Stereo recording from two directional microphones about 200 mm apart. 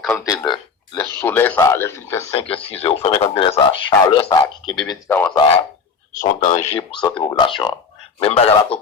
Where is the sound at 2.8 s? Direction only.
30° left (ahead or behind).